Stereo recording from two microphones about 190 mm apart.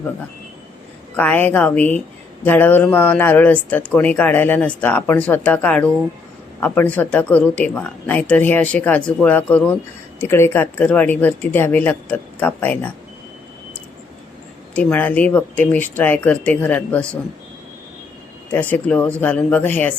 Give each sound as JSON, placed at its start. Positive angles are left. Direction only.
{"t": 1.1, "sound": "speech", "side_deg": 10}
{"t": 14.8, "sound": "speech", "side_deg": 10}
{"t": 18.5, "sound": "speech", "side_deg": 10}